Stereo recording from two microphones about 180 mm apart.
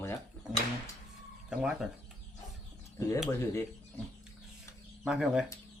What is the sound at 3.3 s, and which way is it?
Speech, 15° left (ahead or behind).